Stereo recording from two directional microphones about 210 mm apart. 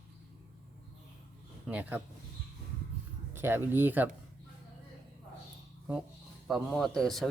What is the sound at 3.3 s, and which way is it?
Speech, 10° right (ahead or behind).